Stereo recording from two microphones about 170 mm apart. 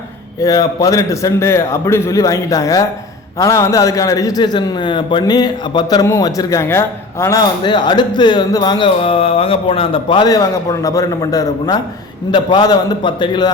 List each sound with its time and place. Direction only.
0.4 s speech: 20° left (ahead or behind)